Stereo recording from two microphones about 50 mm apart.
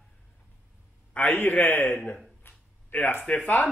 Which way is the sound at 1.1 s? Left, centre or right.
Left.